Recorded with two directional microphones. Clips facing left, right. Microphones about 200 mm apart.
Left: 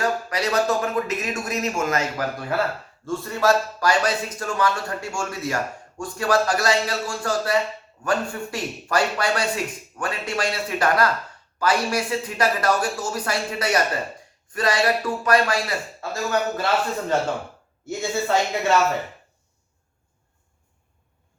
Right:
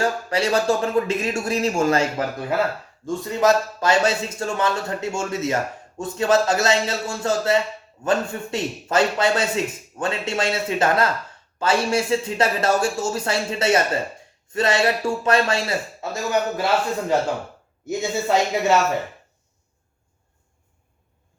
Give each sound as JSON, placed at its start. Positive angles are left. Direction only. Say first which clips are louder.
{"t": 0.0, "sound": "a man's voice", "louder": "right 2 dB", "side_deg": -30}
{"t": 3.1, "sound": "a man's voice", "louder": "right 2 dB", "side_deg": -15}
{"t": 17.8, "sound": "a man's voice", "louder": "right 2 dB", "side_deg": -20}